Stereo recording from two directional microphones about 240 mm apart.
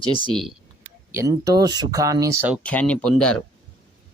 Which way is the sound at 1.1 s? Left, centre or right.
Centre.